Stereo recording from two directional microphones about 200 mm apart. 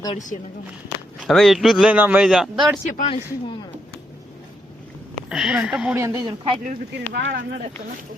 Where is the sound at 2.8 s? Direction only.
35° left (ahead or behind).